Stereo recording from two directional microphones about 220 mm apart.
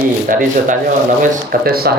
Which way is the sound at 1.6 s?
45° right (ahead or behind).